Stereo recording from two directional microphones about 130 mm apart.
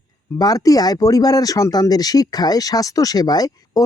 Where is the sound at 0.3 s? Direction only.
30° left (ahead or behind).